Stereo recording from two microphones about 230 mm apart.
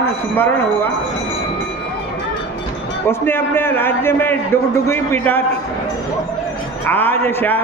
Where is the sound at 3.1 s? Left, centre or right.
Centre.